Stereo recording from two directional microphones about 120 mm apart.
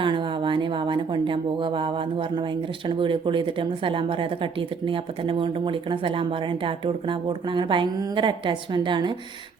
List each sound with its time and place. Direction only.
0.0 s a woman's voice: 40° right (ahead or behind)